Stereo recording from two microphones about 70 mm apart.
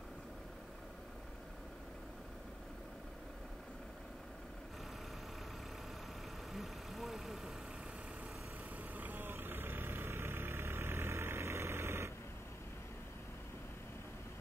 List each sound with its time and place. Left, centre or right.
6.5 s vehicle: centre
8.9 s vehicle: right